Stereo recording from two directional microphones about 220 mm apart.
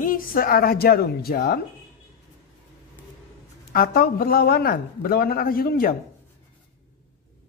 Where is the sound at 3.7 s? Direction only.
40° left (ahead or behind).